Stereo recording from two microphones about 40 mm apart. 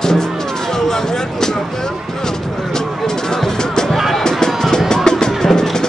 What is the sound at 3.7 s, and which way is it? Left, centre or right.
Music, centre.